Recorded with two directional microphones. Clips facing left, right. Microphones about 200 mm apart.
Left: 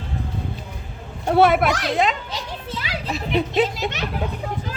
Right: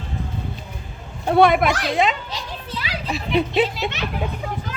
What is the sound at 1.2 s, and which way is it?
Speech, centre (ahead or behind).